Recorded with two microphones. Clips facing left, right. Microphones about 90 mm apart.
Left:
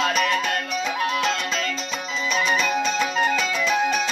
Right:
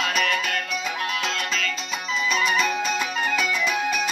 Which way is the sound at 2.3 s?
5° right (ahead or behind).